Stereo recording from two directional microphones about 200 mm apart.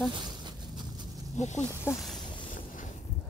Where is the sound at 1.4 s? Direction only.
35° left (ahead or behind).